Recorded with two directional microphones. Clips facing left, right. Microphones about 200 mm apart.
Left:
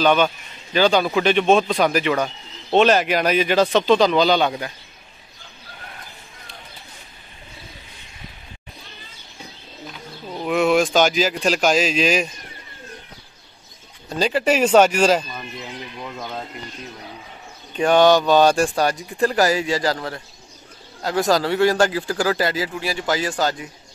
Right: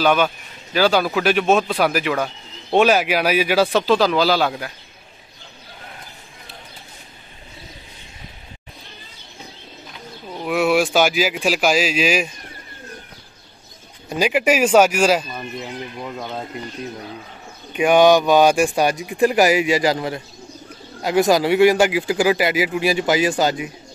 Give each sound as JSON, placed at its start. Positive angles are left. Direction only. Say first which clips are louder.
{"t": 0.0, "sound": "speech", "louder": "even", "side_deg": -5}
{"t": 10.4, "sound": "speech", "louder": "even", "side_deg": -5}
{"t": 14.0, "sound": "speech", "louder": "right 1 dB", "side_deg": -15}
{"t": 17.7, "sound": "speech", "louder": "right 1 dB", "side_deg": -10}